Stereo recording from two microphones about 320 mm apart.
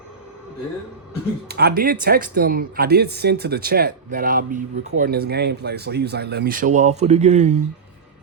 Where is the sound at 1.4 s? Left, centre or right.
Right.